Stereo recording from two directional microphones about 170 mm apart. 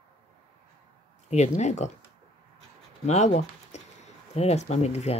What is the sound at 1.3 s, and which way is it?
Speech, 40° left (ahead or behind).